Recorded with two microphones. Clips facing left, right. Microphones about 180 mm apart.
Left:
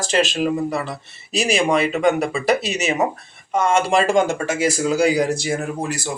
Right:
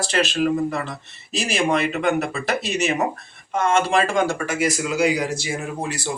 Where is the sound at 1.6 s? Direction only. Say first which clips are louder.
Left 1 dB; 15° left (ahead or behind).